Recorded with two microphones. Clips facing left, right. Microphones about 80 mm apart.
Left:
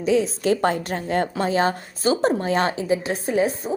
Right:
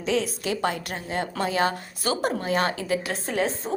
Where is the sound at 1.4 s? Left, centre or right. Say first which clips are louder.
Left 3 dB; left.